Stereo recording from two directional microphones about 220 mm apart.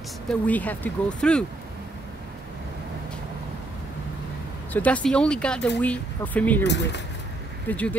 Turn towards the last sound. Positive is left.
turn(degrees=5)  # may be behind; listen again after turning